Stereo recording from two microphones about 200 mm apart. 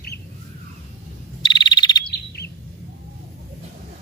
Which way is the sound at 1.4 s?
20° left (ahead or behind).